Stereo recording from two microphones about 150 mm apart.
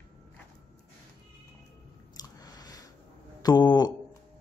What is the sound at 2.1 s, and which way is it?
Chewing, 25° left (ahead or behind).